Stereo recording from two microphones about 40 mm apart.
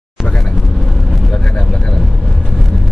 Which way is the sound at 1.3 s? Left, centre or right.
Centre.